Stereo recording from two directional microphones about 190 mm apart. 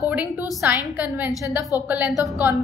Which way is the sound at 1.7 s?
10° right (ahead or behind).